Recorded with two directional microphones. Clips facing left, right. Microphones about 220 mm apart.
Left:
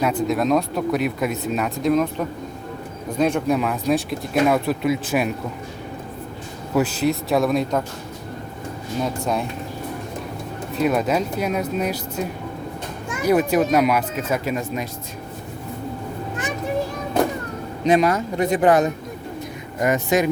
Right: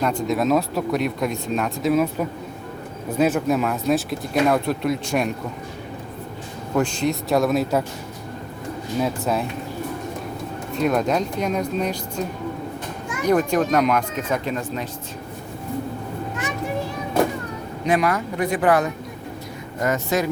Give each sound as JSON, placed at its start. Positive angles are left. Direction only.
{"t": 0.0, "sound": "speech", "side_deg": 5}
{"t": 6.7, "sound": "speech", "side_deg": 5}
{"t": 9.0, "sound": "speech", "side_deg": 0}
{"t": 10.8, "sound": "speech", "side_deg": 5}
{"t": 13.2, "sound": "speech", "side_deg": 5}
{"t": 17.8, "sound": "speech", "side_deg": 25}